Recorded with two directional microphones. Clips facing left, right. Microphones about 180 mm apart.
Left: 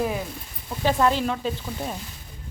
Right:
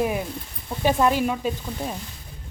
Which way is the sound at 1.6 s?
Centre (ahead or behind).